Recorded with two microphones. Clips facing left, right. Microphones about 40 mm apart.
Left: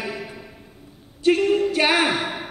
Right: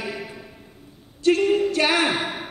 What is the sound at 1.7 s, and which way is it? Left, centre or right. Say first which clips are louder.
Speech: left 1 dB; centre.